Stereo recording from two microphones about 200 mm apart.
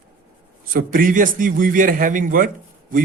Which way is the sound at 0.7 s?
45° right (ahead or behind).